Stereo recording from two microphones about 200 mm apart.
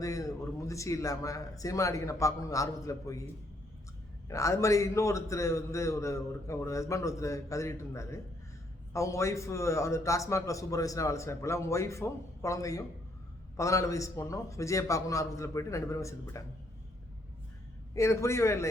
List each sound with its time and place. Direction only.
0.0 s a man's voice: 15° left (ahead or behind)
4.3 s a man's voice: 15° left (ahead or behind)
17.9 s a man's voice: 15° left (ahead or behind)